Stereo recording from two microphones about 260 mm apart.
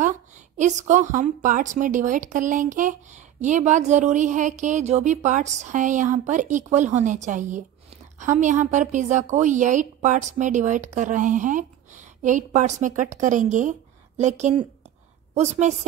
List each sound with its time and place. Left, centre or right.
0.0 s a woman's voice: right